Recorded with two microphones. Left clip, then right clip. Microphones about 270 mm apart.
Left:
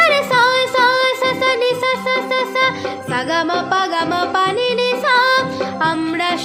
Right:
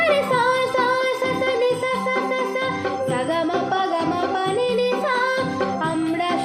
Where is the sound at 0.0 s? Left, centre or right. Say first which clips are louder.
Left 5 dB; left.